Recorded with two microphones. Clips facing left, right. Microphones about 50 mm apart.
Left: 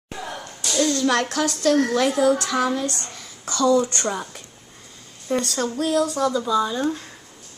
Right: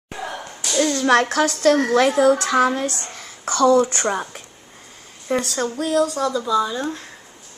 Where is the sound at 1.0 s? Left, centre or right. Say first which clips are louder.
Right 4 dB; right.